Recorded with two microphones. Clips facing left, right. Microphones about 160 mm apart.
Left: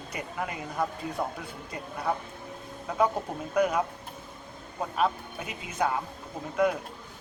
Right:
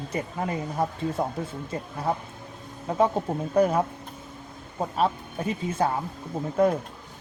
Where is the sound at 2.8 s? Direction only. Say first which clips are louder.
Right 4 dB; 30° right (ahead or behind).